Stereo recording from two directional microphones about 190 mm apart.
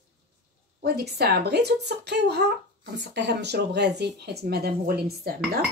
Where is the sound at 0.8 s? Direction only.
55° right (ahead or behind).